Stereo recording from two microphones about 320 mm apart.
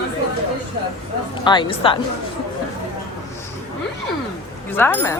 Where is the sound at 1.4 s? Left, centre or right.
Centre.